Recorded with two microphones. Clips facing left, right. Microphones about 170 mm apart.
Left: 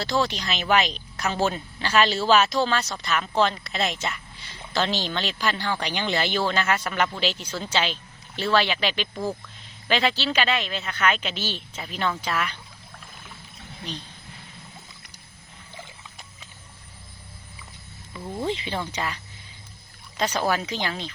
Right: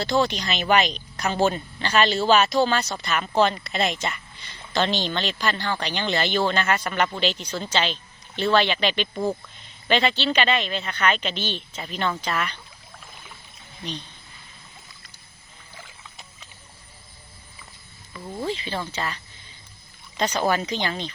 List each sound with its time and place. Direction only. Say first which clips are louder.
0.0 s speech: right 3 dB; centre (ahead or behind)
18.4 s speech: even; 20° left (ahead or behind); by 21.1 s centre (ahead or behind)